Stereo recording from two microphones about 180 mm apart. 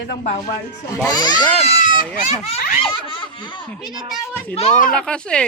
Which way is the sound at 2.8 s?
25° left (ahead or behind).